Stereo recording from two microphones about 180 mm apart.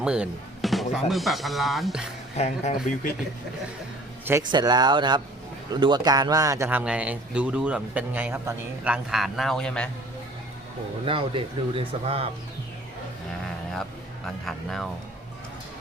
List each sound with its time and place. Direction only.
0.0 s speech: 5° right (ahead or behind)
2.3 s speech: 35° left (ahead or behind)
4.4 s a man's voice: 25° right (ahead or behind); by 9.9 s 5° left (ahead or behind)
11.0 s speech: 30° right (ahead or behind)
13.4 s vehicle: 5° left (ahead or behind)
14.4 s speech: centre (ahead or behind)